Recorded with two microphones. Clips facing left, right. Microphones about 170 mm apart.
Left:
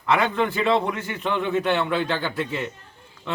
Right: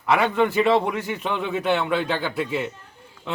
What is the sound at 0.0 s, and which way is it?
A man's voice, 10° right (ahead or behind).